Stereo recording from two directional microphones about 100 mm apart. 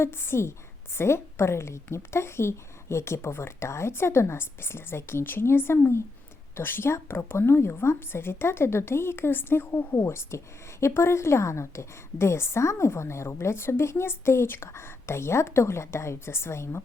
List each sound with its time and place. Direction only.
0.0 s speech: 25° left (ahead or behind)